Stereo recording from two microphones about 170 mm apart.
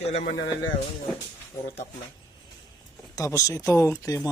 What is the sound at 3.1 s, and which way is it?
Speech, 20° left (ahead or behind).